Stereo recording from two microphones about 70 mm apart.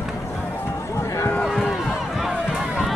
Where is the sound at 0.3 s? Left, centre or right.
Left.